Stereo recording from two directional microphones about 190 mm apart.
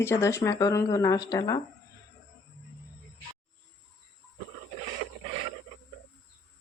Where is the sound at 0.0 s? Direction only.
15° left (ahead or behind).